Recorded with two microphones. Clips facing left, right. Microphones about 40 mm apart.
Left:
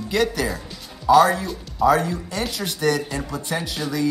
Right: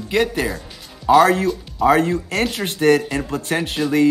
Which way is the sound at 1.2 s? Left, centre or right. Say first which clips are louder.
Right 4 dB; right.